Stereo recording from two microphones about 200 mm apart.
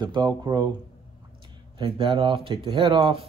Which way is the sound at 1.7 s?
25° right (ahead or behind).